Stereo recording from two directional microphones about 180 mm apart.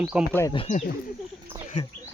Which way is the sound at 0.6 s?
45° left (ahead or behind).